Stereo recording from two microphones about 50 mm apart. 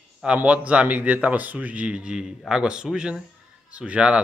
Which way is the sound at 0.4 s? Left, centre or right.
Right.